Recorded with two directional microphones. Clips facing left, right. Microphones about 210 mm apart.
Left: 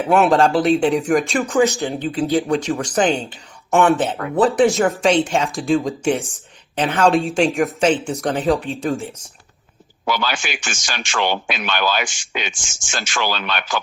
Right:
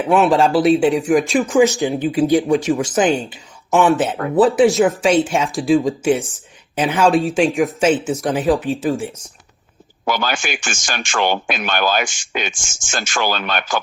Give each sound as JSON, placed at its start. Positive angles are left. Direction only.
{"t": 0.0, "sound": "speech", "side_deg": 0}
{"t": 1.5, "sound": "speech", "side_deg": -15}
{"t": 10.1, "sound": "speech", "side_deg": -45}